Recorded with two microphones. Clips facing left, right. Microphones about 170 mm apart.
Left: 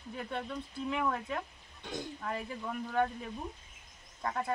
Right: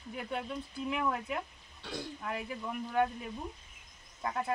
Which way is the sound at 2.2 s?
5° right (ahead or behind).